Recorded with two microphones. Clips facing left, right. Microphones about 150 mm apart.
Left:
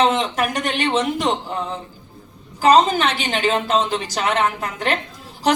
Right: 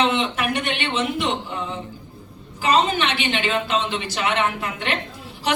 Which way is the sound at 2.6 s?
40° left (ahead or behind).